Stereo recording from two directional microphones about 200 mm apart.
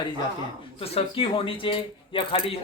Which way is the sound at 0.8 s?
30° left (ahead or behind).